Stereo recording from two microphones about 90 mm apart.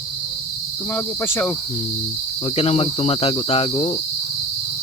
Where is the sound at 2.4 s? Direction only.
90° left.